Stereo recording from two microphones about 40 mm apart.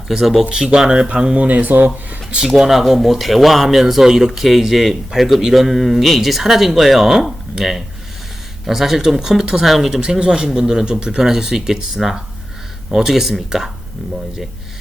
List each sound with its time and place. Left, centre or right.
0.1 s speech: centre; by 1.5 s right
1.5 s speech: right
2.5 s speech: centre
10.0 s speech: right